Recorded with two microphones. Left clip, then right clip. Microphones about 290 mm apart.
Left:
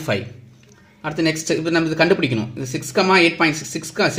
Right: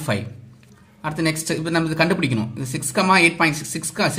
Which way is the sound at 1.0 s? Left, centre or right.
Centre.